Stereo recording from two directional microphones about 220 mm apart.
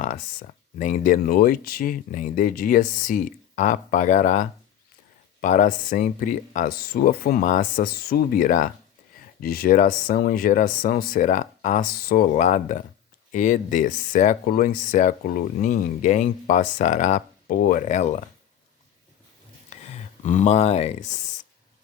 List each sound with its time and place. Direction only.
0.0 s speech: 35° left (ahead or behind)
19.7 s speech: 30° left (ahead or behind)